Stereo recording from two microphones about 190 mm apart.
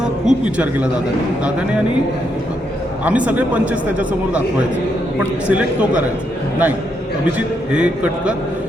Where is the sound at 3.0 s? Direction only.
5° right (ahead or behind).